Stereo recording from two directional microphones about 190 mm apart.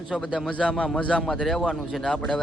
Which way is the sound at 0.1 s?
Centre (ahead or behind).